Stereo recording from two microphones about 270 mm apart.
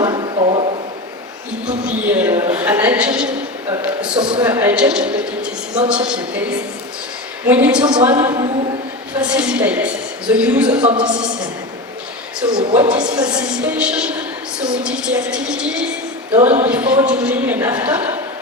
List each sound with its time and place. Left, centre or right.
0.0 s a sound: centre
1.6 s a woman's voice: centre
8.1 s a woman's voice: centre
9.1 s a woman's voice: centre
12.5 s a woman's voice: centre
13.1 s a woman's voice: centre
16.3 s speech: right
16.6 s a woman's voice: centre